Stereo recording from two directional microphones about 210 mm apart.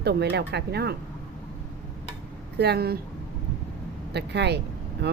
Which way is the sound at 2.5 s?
50° right (ahead or behind).